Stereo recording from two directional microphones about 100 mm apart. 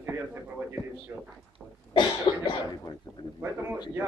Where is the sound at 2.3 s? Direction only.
55° left (ahead or behind).